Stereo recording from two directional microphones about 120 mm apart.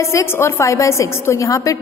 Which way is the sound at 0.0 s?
25° left (ahead or behind).